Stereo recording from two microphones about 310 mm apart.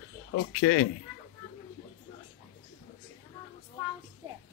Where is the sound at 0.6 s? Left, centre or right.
Left.